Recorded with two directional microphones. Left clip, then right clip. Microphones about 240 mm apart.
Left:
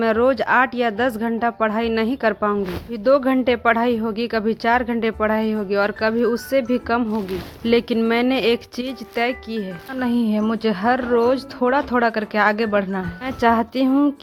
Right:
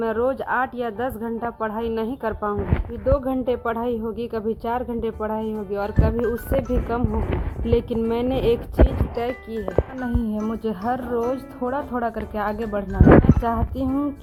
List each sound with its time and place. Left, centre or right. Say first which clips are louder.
0.0 s speech: left 5 dB; left
10.0 s speech: left 6 dB; left